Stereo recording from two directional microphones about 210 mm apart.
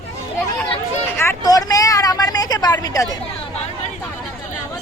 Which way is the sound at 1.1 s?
10° left (ahead or behind).